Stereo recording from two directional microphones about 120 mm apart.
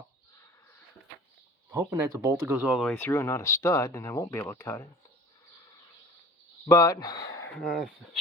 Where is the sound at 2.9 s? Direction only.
20° left (ahead or behind).